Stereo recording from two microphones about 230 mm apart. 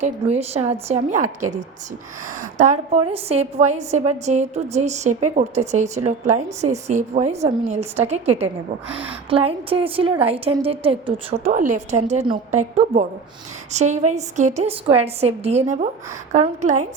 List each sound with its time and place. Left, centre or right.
0.0 s a woman's voice: right
2.6 s a woman's voice: right
9.3 s a woman's voice: right